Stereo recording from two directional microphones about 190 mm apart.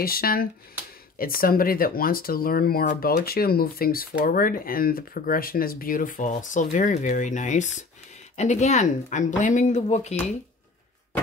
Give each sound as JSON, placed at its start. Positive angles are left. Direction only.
{"t": 0.0, "sound": "speech", "side_deg": 50}